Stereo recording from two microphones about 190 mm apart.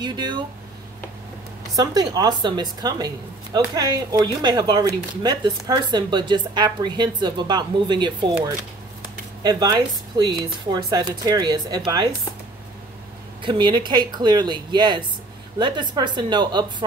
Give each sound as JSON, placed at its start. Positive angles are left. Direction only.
{"t": 0.0, "sound": "speech", "side_deg": -20}
{"t": 1.8, "sound": "speech", "side_deg": -20}
{"t": 9.4, "sound": "speech", "side_deg": -20}
{"t": 13.4, "sound": "speech", "side_deg": -25}